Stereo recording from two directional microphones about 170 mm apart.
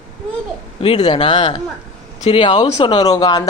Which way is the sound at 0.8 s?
30° left (ahead or behind).